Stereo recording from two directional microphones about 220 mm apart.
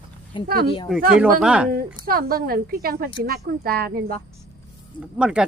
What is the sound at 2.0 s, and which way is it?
A woman's voice, 40° right (ahead or behind).